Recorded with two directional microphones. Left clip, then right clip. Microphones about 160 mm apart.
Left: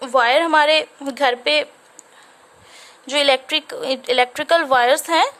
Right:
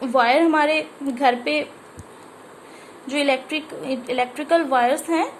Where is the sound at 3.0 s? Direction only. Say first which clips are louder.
Left 5 dB; 50° left (ahead or behind).